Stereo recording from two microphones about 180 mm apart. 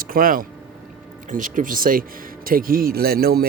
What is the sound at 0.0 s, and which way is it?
A man's voice, 50° right (ahead or behind).